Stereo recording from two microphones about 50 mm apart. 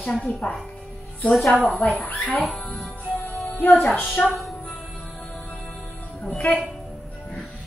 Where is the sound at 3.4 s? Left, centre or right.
Left.